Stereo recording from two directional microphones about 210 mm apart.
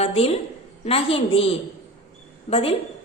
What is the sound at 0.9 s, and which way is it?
A woman's voice, 25° left (ahead or behind).